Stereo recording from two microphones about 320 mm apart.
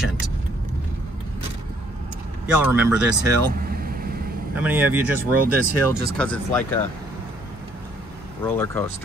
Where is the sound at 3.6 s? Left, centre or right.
Right.